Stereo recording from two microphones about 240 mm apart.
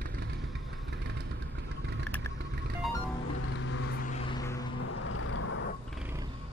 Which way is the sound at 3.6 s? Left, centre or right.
Left.